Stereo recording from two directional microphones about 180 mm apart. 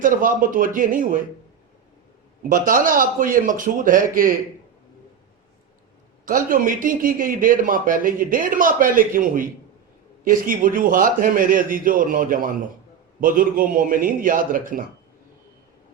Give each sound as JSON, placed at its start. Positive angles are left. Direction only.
{"t": 0.0, "sound": "speech", "side_deg": -50}
{"t": 2.5, "sound": "speech", "side_deg": -50}
{"t": 6.2, "sound": "speech", "side_deg": -50}